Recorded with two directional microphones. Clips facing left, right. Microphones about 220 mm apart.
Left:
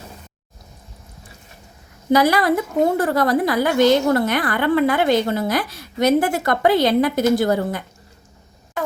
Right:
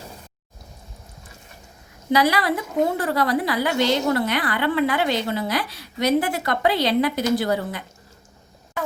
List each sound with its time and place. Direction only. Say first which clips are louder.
2.1 s a woman's voice: left 4 dB; 45° left (ahead or behind)